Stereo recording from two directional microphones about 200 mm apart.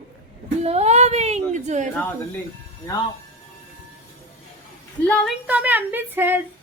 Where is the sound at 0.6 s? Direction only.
30° right (ahead or behind).